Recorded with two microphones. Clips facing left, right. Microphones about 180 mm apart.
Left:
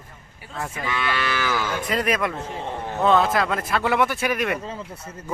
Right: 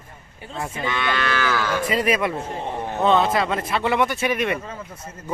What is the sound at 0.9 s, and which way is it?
Livestock, 5° left (ahead or behind).